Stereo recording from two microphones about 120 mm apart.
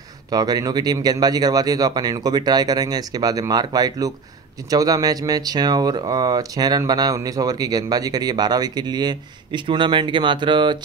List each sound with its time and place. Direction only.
0.3 s speech: 35° right (ahead or behind)